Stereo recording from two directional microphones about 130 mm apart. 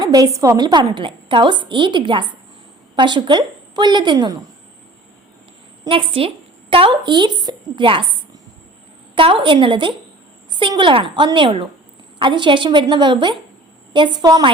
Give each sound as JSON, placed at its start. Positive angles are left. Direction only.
{"t": 0.0, "sound": "a woman's voice", "side_deg": -30}
{"t": 5.9, "sound": "speech", "side_deg": -45}
{"t": 9.1, "sound": "a woman's voice", "side_deg": -40}